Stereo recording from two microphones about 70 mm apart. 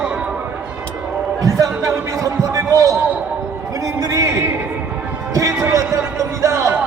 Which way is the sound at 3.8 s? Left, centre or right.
Right.